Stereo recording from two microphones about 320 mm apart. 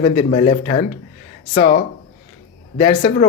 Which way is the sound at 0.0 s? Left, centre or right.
Left.